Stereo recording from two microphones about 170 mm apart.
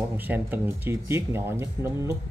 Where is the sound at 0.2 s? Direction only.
10° right (ahead or behind).